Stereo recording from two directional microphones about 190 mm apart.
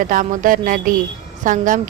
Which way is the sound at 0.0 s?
45° right (ahead or behind).